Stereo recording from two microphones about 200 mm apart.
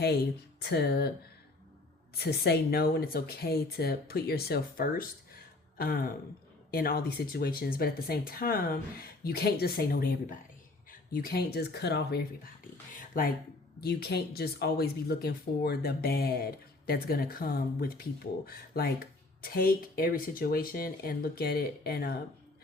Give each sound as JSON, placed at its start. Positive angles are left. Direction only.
{"t": 0.6, "sound": "speech", "side_deg": 55}
{"t": 2.1, "sound": "speech", "side_deg": 55}
{"t": 12.9, "sound": "a sound", "side_deg": 45}
{"t": 13.8, "sound": "speech", "side_deg": 55}